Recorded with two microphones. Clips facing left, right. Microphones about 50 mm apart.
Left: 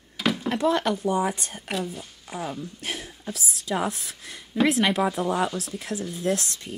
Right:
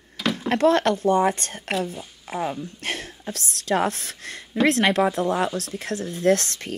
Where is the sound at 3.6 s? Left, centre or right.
Right.